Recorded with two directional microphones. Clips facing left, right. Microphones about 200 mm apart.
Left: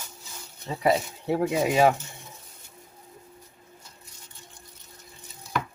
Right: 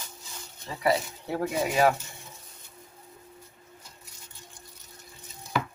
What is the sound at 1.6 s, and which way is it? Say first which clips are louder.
Speech: left 2 dB; 20° left (ahead or behind).